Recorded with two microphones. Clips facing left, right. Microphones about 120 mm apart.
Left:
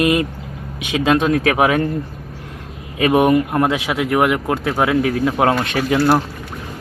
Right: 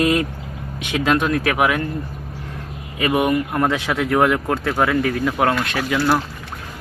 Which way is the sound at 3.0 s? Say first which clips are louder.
Left 5 dB; 25° left (ahead or behind).